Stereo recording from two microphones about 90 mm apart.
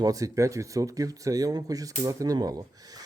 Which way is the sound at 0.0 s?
40° right (ahead or behind).